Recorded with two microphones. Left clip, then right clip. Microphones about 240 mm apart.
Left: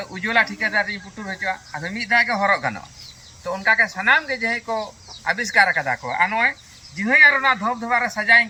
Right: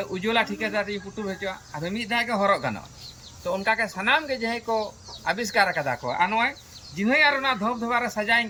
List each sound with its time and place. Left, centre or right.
0.0 s speech: centre